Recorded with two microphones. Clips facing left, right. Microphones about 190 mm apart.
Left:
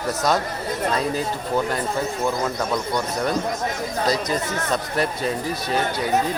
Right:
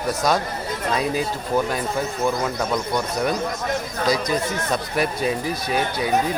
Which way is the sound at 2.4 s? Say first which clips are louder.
Even; 5° right (ahead or behind).